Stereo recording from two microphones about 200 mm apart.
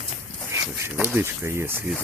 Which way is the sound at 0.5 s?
15° right (ahead or behind).